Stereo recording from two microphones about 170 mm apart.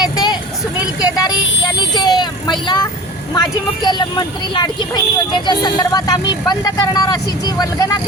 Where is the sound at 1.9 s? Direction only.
25° left (ahead or behind).